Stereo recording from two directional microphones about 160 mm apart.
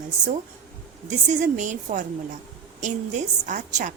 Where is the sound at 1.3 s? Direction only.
50° right (ahead or behind).